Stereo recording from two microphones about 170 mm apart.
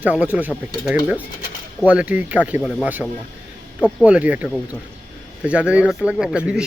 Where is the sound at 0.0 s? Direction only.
10° right (ahead or behind).